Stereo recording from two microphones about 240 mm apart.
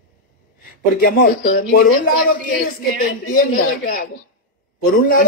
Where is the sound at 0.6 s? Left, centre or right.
Left.